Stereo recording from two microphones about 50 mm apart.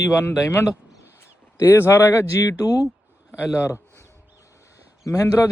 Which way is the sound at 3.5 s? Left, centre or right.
Left.